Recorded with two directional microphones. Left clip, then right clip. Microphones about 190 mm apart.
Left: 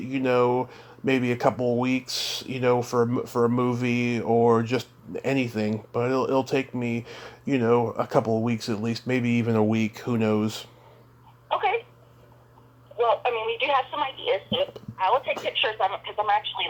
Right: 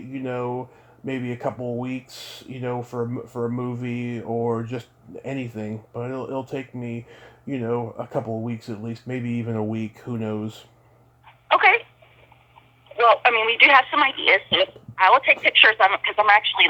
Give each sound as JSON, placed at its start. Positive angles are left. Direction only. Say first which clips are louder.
{"t": 0.1, "sound": "speech", "louder": "left 6 dB", "side_deg": 15}
{"t": 11.4, "sound": "a sound", "louder": "right 8 dB", "side_deg": -25}
{"t": 13.0, "sound": "telephone", "louder": "right 7 dB", "side_deg": -25}
{"t": 14.3, "sound": "speech", "louder": "right 7 dB", "side_deg": -25}